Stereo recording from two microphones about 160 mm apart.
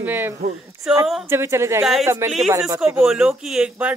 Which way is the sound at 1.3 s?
15° right (ahead or behind).